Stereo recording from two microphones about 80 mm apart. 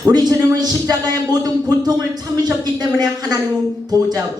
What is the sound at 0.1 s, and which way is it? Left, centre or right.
A man's voice, right.